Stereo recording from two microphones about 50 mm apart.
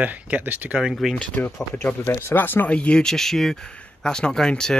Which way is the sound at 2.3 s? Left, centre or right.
Left.